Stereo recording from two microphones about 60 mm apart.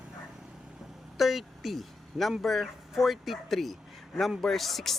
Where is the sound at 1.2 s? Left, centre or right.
Centre.